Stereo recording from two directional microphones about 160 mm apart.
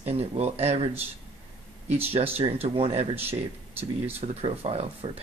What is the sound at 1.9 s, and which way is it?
Speech, 40° right (ahead or behind).